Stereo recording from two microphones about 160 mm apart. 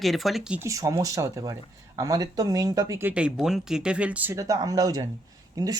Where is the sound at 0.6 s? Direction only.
20° right (ahead or behind).